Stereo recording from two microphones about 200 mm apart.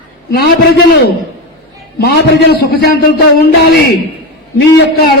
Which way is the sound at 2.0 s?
50° left (ahead or behind).